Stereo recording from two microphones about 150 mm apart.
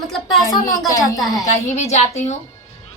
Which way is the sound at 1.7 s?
50° left (ahead or behind).